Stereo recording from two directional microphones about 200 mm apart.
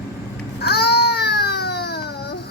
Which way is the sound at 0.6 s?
55° left (ahead or behind).